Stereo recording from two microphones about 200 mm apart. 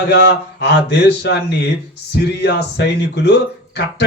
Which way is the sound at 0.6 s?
55° left (ahead or behind).